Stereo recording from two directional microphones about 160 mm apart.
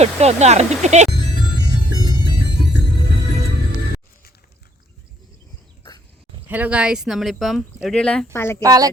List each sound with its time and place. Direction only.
0.0 s speech: 45° right (ahead or behind)
6.5 s speech: 10° right (ahead or behind); by 8.6 s 15° left (ahead or behind)
8.6 s speech: 20° right (ahead or behind)